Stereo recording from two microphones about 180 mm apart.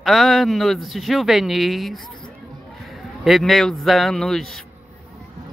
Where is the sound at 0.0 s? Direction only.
Centre (ahead or behind).